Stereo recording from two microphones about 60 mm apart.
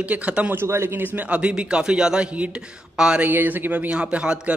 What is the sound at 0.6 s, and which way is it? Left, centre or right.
Speech, right.